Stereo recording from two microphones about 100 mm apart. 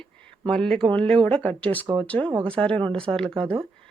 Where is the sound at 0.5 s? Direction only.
5° left (ahead or behind).